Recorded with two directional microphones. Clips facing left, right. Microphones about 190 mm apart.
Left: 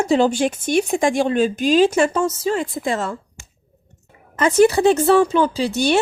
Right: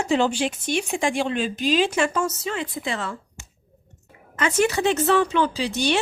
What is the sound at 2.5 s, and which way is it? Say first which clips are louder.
Speech: left 6 dB; 45° left (ahead or behind).